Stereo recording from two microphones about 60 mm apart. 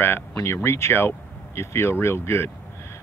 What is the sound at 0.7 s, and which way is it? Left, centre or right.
Speech, left.